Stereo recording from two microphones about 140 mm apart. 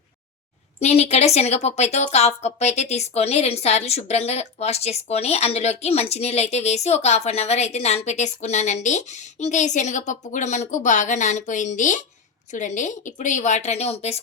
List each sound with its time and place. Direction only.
0.8 s a woman's voice: 50° left (ahead or behind)